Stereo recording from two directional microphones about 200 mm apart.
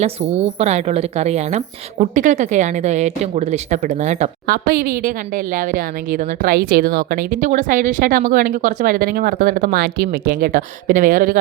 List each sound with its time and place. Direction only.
0.0 s a woman's voice: 30° right (ahead or behind)